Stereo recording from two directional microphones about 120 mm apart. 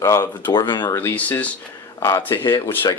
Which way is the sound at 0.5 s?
40° left (ahead or behind).